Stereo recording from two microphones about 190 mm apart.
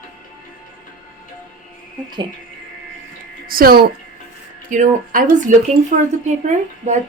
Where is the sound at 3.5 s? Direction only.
50° right (ahead or behind).